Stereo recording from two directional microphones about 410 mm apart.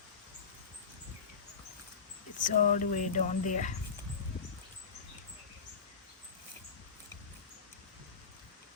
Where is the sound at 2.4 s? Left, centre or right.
Centre.